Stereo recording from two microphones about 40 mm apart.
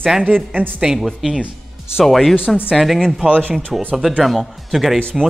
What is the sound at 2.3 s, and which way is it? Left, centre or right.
Speech, left.